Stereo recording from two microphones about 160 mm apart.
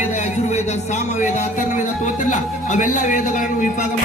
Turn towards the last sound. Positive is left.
turn(degrees=55)  # may be behind; listen again after turning